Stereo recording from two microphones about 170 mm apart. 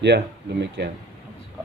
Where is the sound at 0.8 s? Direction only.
80° right.